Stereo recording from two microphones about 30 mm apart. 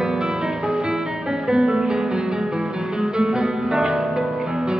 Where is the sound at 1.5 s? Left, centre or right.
Right.